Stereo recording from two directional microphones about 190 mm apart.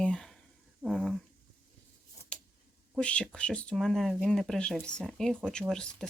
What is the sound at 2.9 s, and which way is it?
Speech, 5° left (ahead or behind).